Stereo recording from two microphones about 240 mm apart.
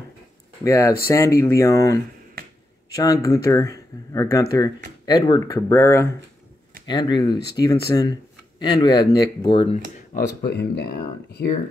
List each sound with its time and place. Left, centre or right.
0.7 s speech: centre
3.0 s speech: centre
10.1 s speech: left